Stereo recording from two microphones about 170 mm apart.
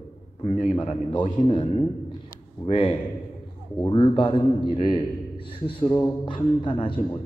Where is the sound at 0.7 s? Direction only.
30° left (ahead or behind).